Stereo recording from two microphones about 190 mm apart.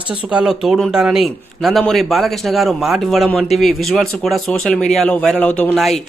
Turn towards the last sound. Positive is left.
turn(degrees=0)  # may be behind; listen again after turning